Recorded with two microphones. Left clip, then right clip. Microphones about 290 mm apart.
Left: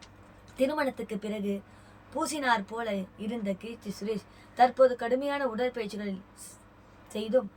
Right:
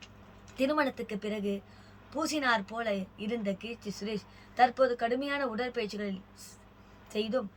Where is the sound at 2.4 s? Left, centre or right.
Centre.